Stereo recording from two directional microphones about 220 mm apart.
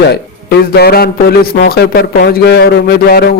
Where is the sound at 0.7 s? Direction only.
45° left (ahead or behind).